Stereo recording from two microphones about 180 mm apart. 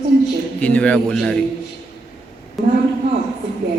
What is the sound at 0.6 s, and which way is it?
Speech, 5° left (ahead or behind).